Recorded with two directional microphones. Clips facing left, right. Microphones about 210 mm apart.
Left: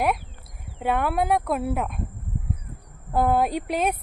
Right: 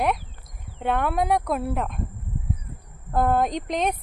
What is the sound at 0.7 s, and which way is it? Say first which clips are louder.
Speech: even; 5° left (ahead or behind).